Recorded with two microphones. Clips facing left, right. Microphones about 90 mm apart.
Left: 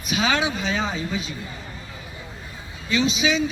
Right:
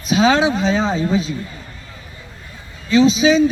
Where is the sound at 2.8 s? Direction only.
35° right (ahead or behind).